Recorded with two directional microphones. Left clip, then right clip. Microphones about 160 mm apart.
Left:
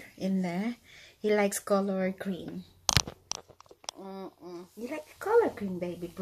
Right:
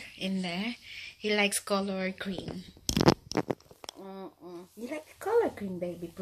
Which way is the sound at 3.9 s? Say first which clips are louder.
Left 1 dB; centre (ahead or behind).